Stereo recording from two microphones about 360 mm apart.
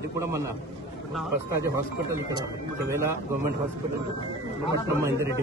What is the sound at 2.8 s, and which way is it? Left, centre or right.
Speech, centre.